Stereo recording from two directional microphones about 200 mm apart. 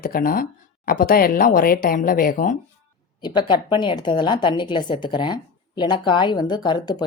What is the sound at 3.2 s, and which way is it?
A woman's voice, 20° left (ahead or behind).